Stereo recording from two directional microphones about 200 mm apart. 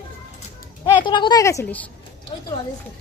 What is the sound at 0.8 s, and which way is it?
Speech, 25° left (ahead or behind).